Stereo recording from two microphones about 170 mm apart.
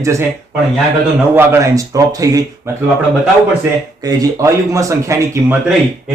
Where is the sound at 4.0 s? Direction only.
20° right (ahead or behind).